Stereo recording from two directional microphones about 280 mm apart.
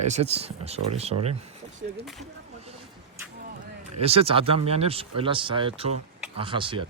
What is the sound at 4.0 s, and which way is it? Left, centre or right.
Speech, right.